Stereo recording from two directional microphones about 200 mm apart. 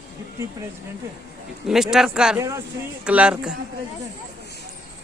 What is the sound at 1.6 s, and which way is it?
Speech, centre (ahead or behind).